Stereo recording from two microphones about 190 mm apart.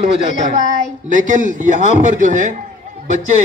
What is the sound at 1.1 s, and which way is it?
A man's voice, 45° right (ahead or behind).